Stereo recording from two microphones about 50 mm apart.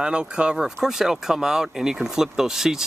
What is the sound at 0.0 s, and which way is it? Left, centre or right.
Speech, centre.